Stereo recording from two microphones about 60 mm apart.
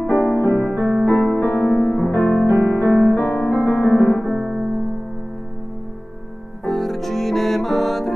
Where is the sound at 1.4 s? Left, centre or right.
Left.